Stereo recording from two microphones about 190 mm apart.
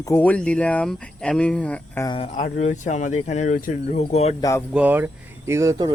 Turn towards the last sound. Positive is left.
turn(degrees=-20)  # may be behind; listen again after turning